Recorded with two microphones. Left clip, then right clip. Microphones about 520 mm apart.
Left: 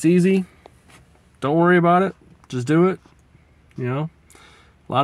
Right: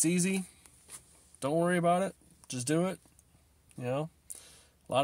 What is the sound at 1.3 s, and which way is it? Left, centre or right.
Speech, right.